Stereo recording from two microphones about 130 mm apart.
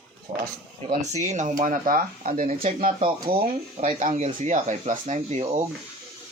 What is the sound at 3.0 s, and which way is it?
Speech, 45° right (ahead or behind).